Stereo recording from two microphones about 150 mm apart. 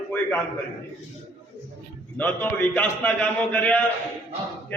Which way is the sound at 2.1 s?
10° left (ahead or behind).